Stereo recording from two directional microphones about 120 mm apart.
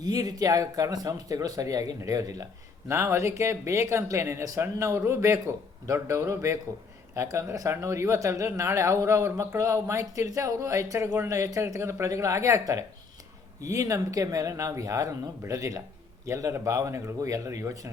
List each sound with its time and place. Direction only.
0.0 s speech: 35° right (ahead or behind)